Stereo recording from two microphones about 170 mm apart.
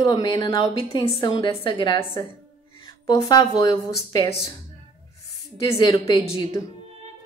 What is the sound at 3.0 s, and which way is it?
A woman's voice, 25° left (ahead or behind).